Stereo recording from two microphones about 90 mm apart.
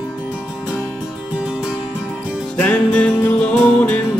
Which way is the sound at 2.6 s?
15° left (ahead or behind).